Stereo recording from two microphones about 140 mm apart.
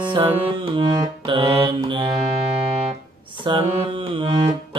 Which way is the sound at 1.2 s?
40° right (ahead or behind).